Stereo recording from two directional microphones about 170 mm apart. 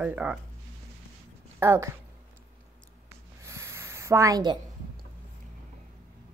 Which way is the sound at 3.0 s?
15° right (ahead or behind).